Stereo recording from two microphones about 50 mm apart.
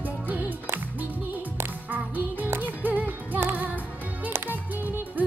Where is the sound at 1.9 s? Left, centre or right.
Right.